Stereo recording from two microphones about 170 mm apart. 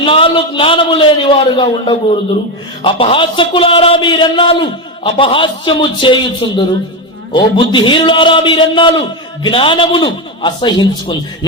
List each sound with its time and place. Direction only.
0.0 s a man's voice: 30° left (ahead or behind)